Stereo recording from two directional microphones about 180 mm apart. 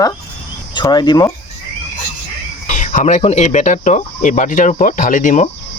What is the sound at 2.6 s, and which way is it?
Speech, 45° left (ahead or behind).